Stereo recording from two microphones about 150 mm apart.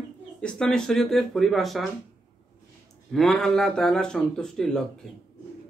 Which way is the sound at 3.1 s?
Centre (ahead or behind).